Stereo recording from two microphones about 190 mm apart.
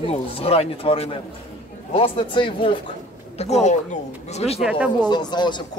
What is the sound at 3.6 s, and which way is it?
Speech, 35° left (ahead or behind).